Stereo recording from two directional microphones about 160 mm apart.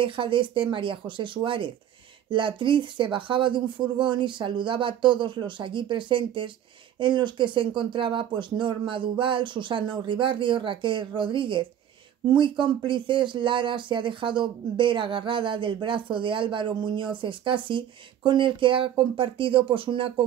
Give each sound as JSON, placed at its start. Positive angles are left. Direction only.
{"t": 0.0, "sound": "speech", "side_deg": -30}